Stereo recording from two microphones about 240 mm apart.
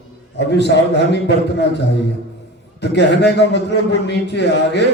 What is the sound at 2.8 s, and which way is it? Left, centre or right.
A man's voice, left.